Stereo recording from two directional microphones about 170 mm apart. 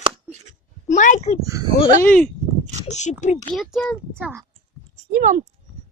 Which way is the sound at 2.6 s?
45° right (ahead or behind).